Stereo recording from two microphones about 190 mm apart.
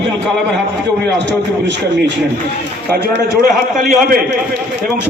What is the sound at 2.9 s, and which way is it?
A man's voice, 55° right (ahead or behind).